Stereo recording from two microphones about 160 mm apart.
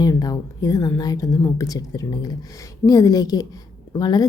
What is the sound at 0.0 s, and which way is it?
A woman's voice, 25° left (ahead or behind).